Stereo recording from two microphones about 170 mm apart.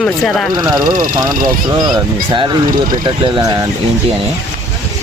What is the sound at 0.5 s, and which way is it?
Speech, 25° right (ahead or behind).